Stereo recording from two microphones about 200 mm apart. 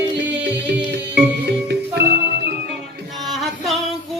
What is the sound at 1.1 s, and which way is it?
Music, 55° right (ahead or behind).